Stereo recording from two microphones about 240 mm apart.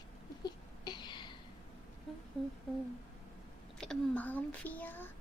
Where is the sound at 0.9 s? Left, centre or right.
Centre.